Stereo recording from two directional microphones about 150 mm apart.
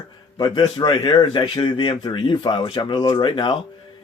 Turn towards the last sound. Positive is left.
turn(degrees=35)  # may be behind; listen again after turning